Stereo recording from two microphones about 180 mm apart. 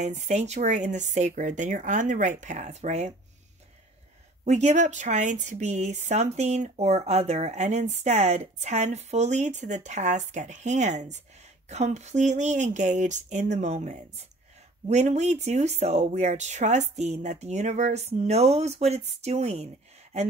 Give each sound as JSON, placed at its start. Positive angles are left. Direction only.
{"t": 0.0, "sound": "speech", "side_deg": -40}
{"t": 4.5, "sound": "speech", "side_deg": -40}